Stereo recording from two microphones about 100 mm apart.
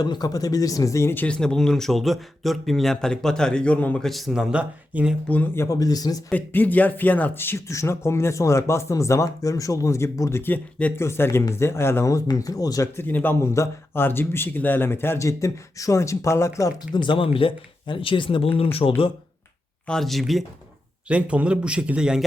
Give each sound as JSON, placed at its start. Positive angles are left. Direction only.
{"t": 0.0, "sound": "speech", "side_deg": 40}
{"t": 1.1, "sound": "speech", "side_deg": 15}
{"t": 4.0, "sound": "speech", "side_deg": 0}
{"t": 5.5, "sound": "speech", "side_deg": 35}
{"t": 6.3, "sound": "speech", "side_deg": 20}
{"t": 13.0, "sound": "speech", "side_deg": 20}
{"t": 17.0, "sound": "speech", "side_deg": 60}
{"t": 19.9, "sound": "speech", "side_deg": 0}
{"t": 21.1, "sound": "speech", "side_deg": -15}